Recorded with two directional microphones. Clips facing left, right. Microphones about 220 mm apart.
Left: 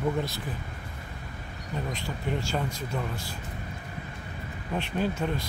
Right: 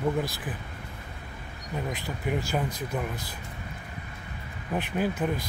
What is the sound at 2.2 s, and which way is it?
Speech, 10° right (ahead or behind).